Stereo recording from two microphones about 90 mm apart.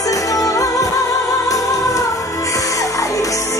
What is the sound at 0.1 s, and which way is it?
Music, 40° left (ahead or behind).